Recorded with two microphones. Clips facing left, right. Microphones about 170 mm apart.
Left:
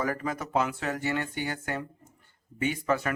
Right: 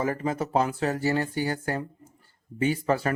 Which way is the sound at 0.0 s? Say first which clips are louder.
Right 4 dB; 25° right (ahead or behind).